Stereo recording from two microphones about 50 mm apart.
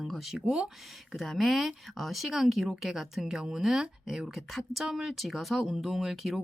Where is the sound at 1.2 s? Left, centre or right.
Centre.